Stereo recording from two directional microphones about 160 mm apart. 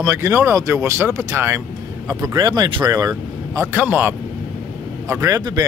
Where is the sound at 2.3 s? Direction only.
25° right (ahead or behind).